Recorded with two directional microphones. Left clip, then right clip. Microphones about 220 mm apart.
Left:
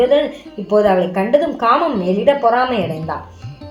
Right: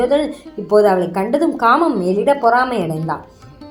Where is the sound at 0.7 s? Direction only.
30° right (ahead or behind).